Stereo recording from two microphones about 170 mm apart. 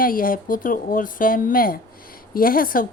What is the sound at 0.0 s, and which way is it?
Speech, 55° left (ahead or behind).